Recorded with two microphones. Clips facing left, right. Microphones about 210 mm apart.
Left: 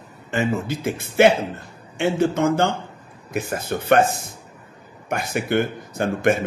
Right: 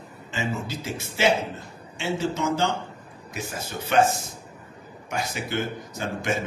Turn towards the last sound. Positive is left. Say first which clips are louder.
# left 8 dB
turn(degrees=55)  # may be behind; listen again after turning